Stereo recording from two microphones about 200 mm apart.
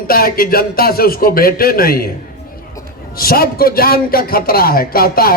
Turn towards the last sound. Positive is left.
turn(degrees=50)  # may be behind; listen again after turning